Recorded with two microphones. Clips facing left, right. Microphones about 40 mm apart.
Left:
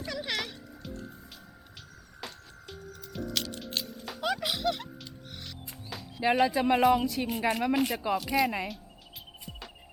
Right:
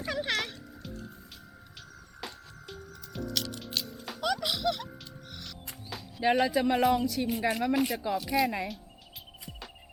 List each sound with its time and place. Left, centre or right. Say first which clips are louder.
0.0 s music: right 3 dB; centre
0.3 s music: right 2 dB; centre
2.2 s music: right 1 dB; centre
4.2 s music: even; centre
5.3 s speech: right 2 dB; centre